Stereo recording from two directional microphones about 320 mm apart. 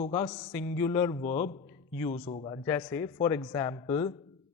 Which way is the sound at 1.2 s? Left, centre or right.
Left.